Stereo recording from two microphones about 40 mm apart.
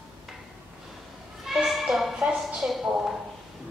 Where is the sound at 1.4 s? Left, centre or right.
Centre.